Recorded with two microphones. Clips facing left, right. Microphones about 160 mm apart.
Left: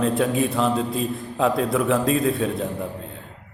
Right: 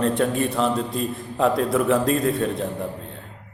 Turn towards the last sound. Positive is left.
turn(degrees=0)  # may be behind; listen again after turning